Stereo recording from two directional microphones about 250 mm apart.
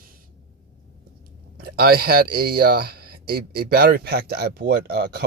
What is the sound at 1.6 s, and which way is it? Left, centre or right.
Speech, right.